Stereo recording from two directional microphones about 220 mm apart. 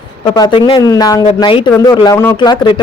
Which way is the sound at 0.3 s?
20° left (ahead or behind).